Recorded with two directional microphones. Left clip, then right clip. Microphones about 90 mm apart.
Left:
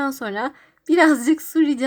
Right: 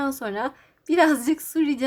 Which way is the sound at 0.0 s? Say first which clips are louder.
Left 2 dB; 40° left (ahead or behind).